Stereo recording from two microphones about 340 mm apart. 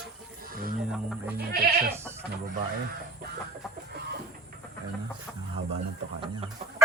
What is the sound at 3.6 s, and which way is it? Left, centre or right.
Speech, centre.